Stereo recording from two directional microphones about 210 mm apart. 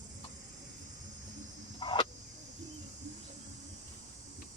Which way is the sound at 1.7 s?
25° left (ahead or behind).